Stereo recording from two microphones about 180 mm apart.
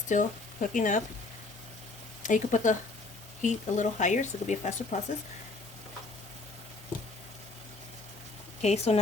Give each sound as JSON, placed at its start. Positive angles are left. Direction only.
{"t": 0.1, "sound": "speech", "side_deg": 45}
{"t": 2.2, "sound": "speech", "side_deg": 45}
{"t": 8.6, "sound": "speech", "side_deg": 35}